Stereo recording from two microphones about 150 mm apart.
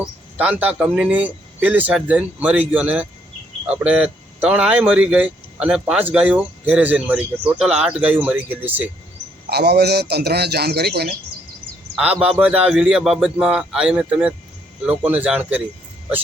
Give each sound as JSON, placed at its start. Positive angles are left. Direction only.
{"t": 0.0, "sound": "speech", "side_deg": -5}
{"t": 9.5, "sound": "a man's voice", "side_deg": -90}
{"t": 11.9, "sound": "a man's voice", "side_deg": -10}